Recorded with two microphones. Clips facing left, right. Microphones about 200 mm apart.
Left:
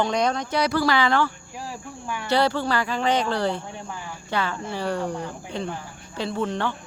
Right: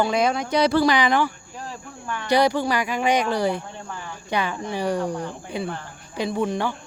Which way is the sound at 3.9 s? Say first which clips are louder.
Even; 10° left (ahead or behind).